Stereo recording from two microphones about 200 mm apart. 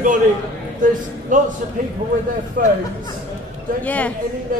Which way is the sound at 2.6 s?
40° right (ahead or behind).